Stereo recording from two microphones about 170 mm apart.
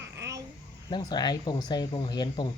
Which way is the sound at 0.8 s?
25° left (ahead or behind).